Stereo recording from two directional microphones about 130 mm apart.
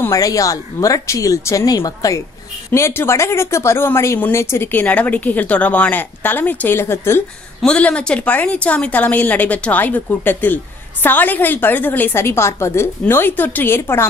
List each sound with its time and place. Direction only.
0.0 s a woman's voice: 25° left (ahead or behind)
7.6 s a woman's voice: 5° left (ahead or behind)